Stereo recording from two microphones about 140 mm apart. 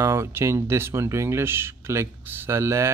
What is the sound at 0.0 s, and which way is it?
Speech, 20° right (ahead or behind).